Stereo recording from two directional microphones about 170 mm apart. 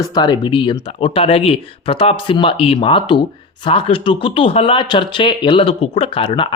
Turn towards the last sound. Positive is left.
turn(degrees=30)  # may be behind; listen again after turning